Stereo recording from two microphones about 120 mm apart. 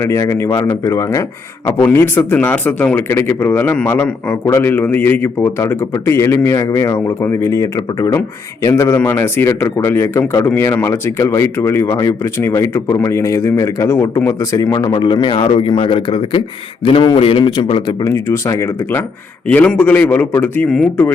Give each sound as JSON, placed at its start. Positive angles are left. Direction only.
{"t": 0.0, "sound": "speech", "side_deg": 25}
{"t": 18.0, "sound": "speech", "side_deg": 25}
{"t": 19.5, "sound": "speech", "side_deg": 10}